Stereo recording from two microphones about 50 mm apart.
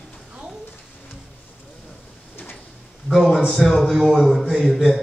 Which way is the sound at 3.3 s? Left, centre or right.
Centre.